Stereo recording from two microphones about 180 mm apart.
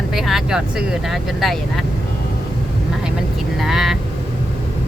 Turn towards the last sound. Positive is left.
turn(degrees=0)  # may be behind; listen again after turning